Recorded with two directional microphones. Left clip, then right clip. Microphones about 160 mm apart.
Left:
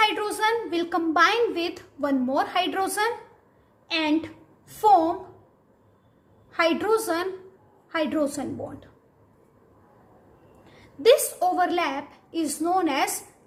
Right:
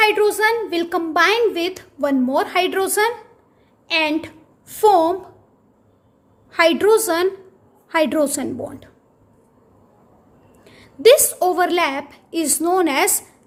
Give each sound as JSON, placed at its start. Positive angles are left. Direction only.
{"t": 0.0, "sound": "a woman's voice", "side_deg": -45}
{"t": 6.5, "sound": "a woman's voice", "side_deg": -60}
{"t": 10.6, "sound": "a woman's voice", "side_deg": -65}